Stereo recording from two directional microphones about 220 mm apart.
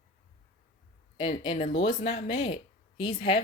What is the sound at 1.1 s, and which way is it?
Speech, 20° left (ahead or behind).